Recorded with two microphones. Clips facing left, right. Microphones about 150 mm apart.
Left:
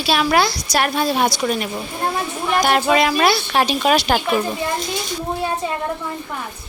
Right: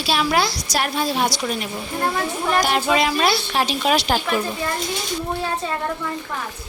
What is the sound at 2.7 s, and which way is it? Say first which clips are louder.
A woman's voice: left 3 dB; 60° left (ahead or behind).